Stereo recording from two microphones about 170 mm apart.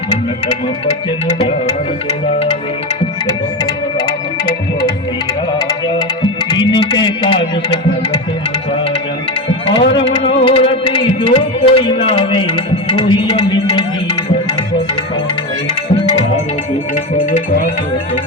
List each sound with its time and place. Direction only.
2.0 s music: 35° left (ahead or behind)
5.5 s speech: 25° left (ahead or behind)
9.8 s music: 90° left
10.1 s music: 30° left (ahead or behind)